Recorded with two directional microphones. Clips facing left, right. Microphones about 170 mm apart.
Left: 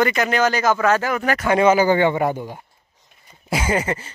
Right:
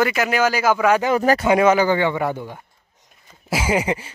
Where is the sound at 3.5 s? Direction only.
10° right (ahead or behind).